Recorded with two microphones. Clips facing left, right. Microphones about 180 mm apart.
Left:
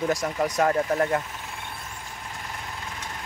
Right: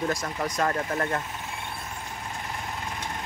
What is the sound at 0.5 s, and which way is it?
Speech, 15° left (ahead or behind).